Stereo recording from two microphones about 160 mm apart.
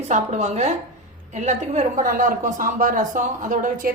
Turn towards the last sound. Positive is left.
turn(degrees=-55)  # may be behind; listen again after turning